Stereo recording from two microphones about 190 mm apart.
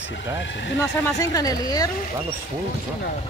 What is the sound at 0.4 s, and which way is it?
Speech, 70° left (ahead or behind).